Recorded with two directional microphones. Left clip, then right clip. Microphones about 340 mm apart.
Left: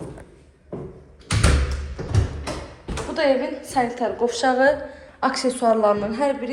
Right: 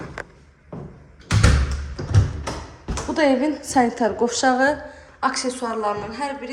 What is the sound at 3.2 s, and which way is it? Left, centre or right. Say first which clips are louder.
A woman's voice: right 1 dB; right.